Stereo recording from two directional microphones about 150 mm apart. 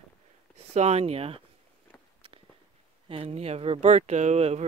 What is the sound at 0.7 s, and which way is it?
Speech, 45° right (ahead or behind).